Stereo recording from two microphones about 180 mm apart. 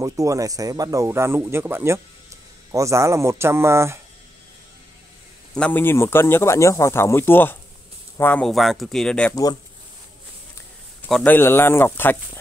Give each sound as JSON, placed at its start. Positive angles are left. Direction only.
{"t": 0.0, "sound": "speech", "side_deg": -20}
{"t": 5.5, "sound": "speech", "side_deg": 10}
{"t": 9.3, "sound": "speech", "side_deg": 20}
{"t": 11.1, "sound": "speech", "side_deg": 5}